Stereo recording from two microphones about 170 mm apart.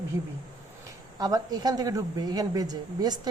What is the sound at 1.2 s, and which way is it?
Speech, 20° right (ahead or behind).